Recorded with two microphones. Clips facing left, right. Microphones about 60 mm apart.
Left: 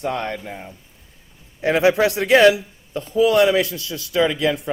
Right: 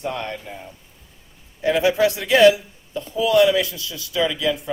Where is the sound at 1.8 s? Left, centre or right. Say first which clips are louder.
Left 4 dB; left.